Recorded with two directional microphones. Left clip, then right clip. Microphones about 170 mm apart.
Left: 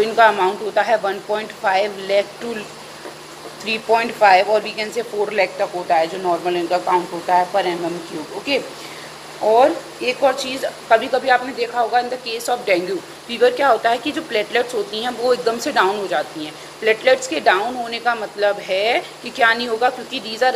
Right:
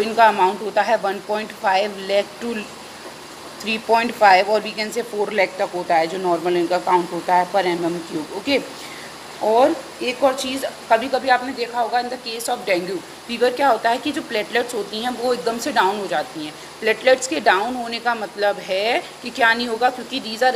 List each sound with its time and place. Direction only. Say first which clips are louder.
0.0 s a woman's voice: left 1 dB; 35° right (ahead or behind)
3.6 s speech: left 1 dB; 45° right (ahead or behind)
9.5 s a woman's voice: left 2 dB; 35° right (ahead or behind)